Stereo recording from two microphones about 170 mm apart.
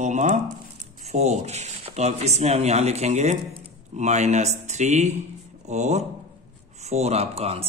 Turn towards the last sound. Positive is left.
turn(degrees=-35)  # may be behind; listen again after turning